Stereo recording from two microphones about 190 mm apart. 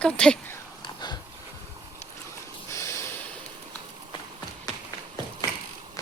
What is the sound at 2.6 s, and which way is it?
Snort, 15° left (ahead or behind).